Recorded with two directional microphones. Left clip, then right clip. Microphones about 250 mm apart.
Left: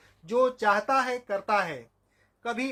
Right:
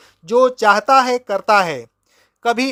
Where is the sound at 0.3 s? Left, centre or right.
Right.